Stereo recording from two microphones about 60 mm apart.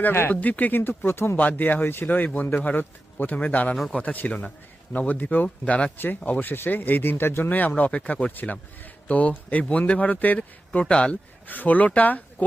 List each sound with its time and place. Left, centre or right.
0.1 s speech: left
0.3 s a man's voice: left
0.8 s speech: left
1.4 s a man's voice: left
7.5 s a man's voice: left
11.4 s a man's voice: left